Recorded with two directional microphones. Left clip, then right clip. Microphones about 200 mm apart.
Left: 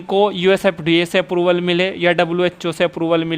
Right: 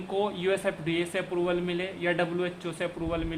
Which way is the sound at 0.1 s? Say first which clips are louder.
Left 13 dB; 50° left (ahead or behind).